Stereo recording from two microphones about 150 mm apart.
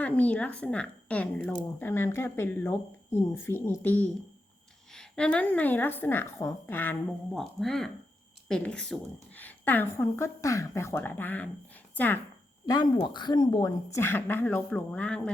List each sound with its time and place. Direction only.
0.0 s a woman's voice: 10° left (ahead or behind)
7.3 s a woman's voice: centre (ahead or behind)
12.6 s a woman's voice: 25° left (ahead or behind); by 15.3 s 5° left (ahead or behind)